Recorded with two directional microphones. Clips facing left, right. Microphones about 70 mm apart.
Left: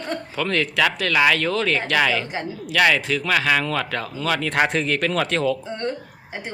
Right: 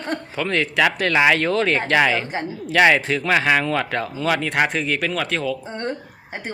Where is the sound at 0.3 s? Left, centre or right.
Centre.